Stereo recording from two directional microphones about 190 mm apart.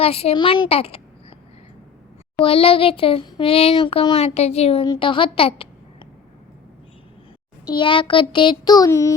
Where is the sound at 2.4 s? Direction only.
30° left (ahead or behind).